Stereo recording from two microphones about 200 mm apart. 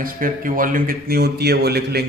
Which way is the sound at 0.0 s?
45° right (ahead or behind).